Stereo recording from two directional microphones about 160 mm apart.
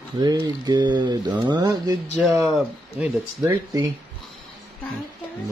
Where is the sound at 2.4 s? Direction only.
5° right (ahead or behind).